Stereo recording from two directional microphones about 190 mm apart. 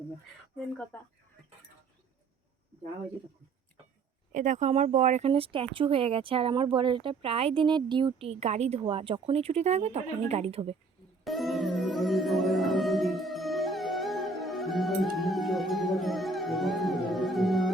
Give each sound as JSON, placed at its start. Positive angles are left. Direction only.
{"t": 0.9, "sound": "speech", "side_deg": 10}
{"t": 4.3, "sound": "speech", "side_deg": -40}
{"t": 11.2, "sound": "music", "side_deg": 0}